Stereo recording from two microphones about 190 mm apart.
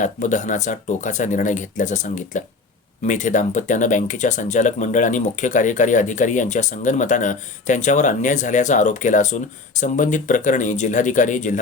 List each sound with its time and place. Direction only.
0.0 s speech: 40° left (ahead or behind)